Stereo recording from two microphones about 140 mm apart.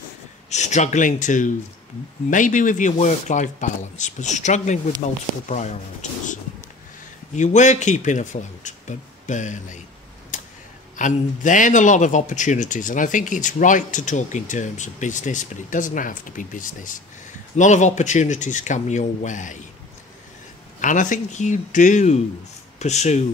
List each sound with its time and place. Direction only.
0.5 s a man's voice: 55° left (ahead or behind)
7.3 s a man's voice: 60° left (ahead or behind)
10.3 s a sound: 60° left (ahead or behind)
11.0 s a man's voice: 65° left (ahead or behind)
17.6 s a man's voice: 60° left (ahead or behind)
20.8 s a man's voice: 65° left (ahead or behind)